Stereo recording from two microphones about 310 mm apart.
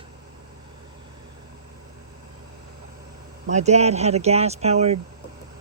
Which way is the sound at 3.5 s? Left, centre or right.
Right.